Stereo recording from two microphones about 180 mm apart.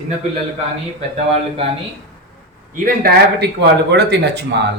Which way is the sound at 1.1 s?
30° right (ahead or behind).